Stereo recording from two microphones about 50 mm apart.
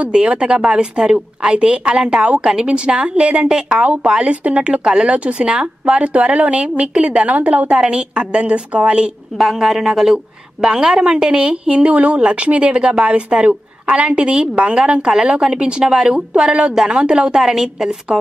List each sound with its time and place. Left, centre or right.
0.1 s a woman's voice: centre
9.4 s a woman's voice: centre
11.7 s a woman's voice: right; by 17.9 s centre